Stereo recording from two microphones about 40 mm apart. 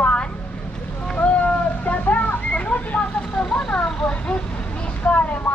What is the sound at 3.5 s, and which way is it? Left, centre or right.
Speech, left.